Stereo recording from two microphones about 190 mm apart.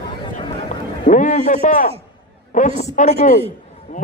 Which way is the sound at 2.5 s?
40° left (ahead or behind).